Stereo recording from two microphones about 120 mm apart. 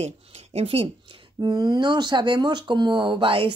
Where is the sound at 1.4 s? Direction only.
35° right (ahead or behind).